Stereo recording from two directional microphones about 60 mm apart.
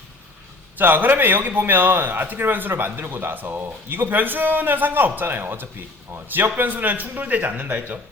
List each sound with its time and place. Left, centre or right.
0.8 s a man's voice: right